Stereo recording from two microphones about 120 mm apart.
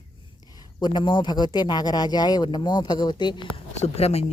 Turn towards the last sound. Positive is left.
turn(degrees=60)  # may be behind; listen again after turning